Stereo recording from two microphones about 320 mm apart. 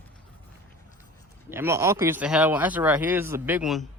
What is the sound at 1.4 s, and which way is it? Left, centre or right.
Speech, centre.